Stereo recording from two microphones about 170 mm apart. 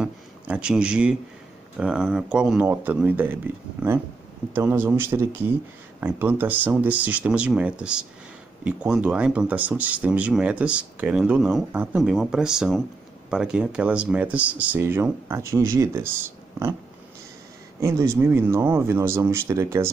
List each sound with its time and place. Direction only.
0.0 s a sound: 5° right (ahead or behind)
1.8 s speech: 5° right (ahead or behind)
4.6 s speech: 10° right (ahead or behind)
17.7 s speech: 15° right (ahead or behind)